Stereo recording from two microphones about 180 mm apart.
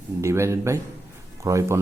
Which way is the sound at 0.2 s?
15° right (ahead or behind).